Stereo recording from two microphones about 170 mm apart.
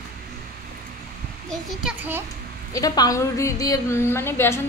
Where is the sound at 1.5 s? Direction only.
Centre (ahead or behind).